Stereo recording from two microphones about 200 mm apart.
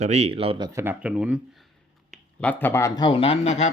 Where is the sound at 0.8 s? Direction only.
10° right (ahead or behind).